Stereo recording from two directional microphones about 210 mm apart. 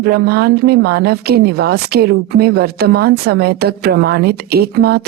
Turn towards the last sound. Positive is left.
turn(degrees=-50)  # may be behind; listen again after turning